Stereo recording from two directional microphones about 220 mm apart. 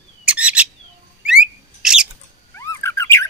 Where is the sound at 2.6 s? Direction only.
10° left (ahead or behind).